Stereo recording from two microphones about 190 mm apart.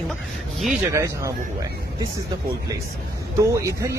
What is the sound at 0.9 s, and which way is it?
Speech, 15° right (ahead or behind).